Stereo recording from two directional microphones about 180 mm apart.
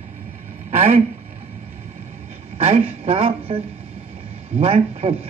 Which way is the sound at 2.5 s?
35° right (ahead or behind).